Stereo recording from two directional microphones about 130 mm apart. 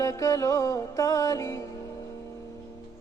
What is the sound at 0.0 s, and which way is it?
Music, 25° left (ahead or behind).